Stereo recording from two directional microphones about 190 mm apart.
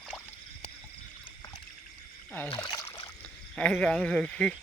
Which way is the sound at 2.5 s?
20° left (ahead or behind).